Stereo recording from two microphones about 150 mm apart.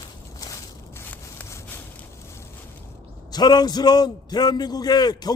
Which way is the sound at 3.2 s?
25° left (ahead or behind).